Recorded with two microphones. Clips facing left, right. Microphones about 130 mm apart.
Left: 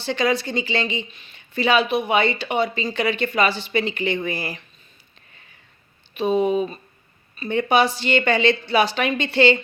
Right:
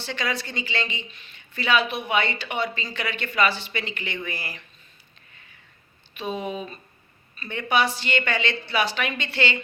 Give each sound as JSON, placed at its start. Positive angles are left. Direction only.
{"t": 0.0, "sound": "speech", "side_deg": 30}
{"t": 6.1, "sound": "a woman's voice", "side_deg": 30}